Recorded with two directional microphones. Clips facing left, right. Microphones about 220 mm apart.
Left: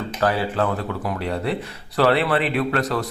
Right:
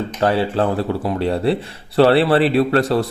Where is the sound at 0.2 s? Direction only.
25° right (ahead or behind).